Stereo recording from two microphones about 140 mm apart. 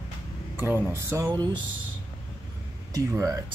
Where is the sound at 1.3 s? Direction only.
35° right (ahead or behind).